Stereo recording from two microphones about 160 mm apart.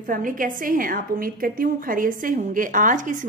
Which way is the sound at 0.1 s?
60° right (ahead or behind).